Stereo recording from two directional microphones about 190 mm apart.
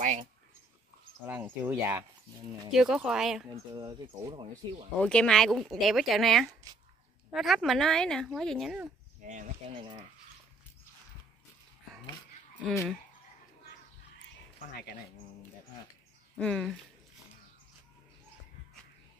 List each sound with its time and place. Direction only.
1.2 s speech: 10° right (ahead or behind)
2.7 s speech: centre (ahead or behind)
3.7 s speech: 20° right (ahead or behind)
5.0 s speech: 5° left (ahead or behind)
9.2 s speech: 40° right (ahead or behind)
16.3 s speech: 5° left (ahead or behind)